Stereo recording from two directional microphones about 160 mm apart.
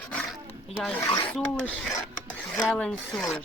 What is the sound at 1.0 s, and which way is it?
Speech, 25° left (ahead or behind).